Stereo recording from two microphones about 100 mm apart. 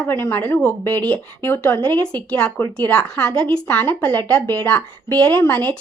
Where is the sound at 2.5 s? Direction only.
25° left (ahead or behind).